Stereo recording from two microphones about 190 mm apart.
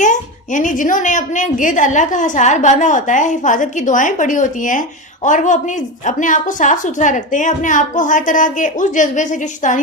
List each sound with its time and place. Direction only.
0.0 s a woman's voice: 40° left (ahead or behind)